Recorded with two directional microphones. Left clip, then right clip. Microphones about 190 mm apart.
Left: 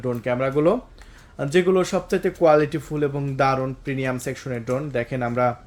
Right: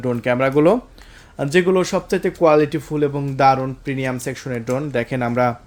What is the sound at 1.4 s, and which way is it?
Speech, 25° right (ahead or behind).